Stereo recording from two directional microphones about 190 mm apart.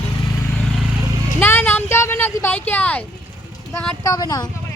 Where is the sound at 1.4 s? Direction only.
10° left (ahead or behind).